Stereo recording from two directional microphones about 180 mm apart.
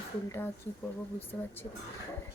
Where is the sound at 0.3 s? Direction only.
10° left (ahead or behind).